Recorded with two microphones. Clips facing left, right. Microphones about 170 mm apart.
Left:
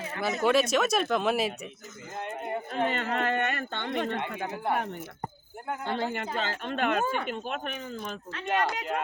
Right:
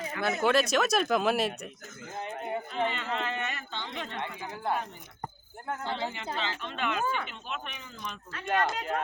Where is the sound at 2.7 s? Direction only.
50° left (ahead or behind).